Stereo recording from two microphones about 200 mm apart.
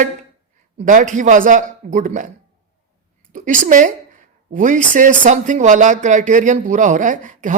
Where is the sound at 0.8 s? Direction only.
40° right (ahead or behind).